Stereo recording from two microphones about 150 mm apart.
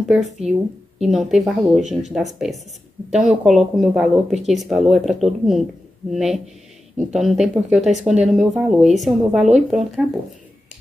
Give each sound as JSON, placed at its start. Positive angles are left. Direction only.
{"t": 0.1, "sound": "speech", "side_deg": -5}
{"t": 1.8, "sound": "speech", "side_deg": -55}
{"t": 2.1, "sound": "speech", "side_deg": 0}